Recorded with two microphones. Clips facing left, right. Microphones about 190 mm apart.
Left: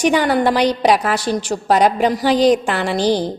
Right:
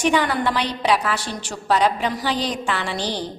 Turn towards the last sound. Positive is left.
turn(degrees=40)  # may be behind; listen again after turning